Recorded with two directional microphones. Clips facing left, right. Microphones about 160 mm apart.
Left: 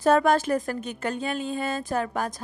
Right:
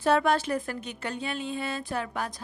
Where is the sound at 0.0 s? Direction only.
45° left (ahead or behind).